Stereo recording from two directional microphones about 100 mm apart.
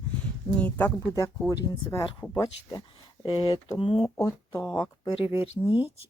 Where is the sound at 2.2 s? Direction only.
35° left (ahead or behind).